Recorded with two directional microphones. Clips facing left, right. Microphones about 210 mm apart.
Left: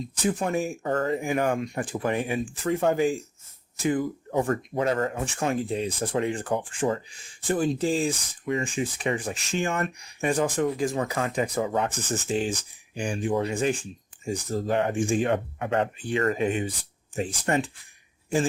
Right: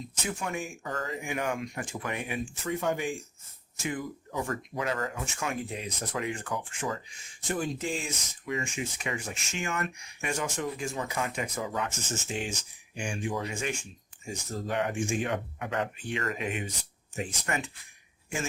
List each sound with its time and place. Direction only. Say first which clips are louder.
0.2 s speech: left 9 dB; 35° left (ahead or behind)
0.9 s speech: left 10 dB; 55° left (ahead or behind)
1.1 s speech: left 7 dB; 35° left (ahead or behind)
4.4 s speech: left 7 dB; 35° left (ahead or behind)